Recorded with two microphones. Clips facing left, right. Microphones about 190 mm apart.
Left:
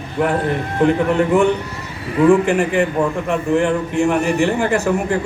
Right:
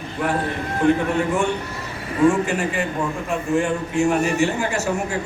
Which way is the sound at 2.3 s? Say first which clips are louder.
Left 8 dB; 60° left (ahead or behind).